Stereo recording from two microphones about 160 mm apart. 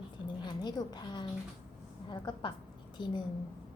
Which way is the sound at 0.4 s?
25° left (ahead or behind).